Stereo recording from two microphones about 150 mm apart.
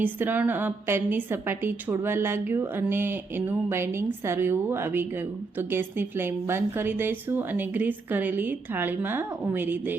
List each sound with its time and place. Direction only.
0.0 s a woman's voice: 10° right (ahead or behind)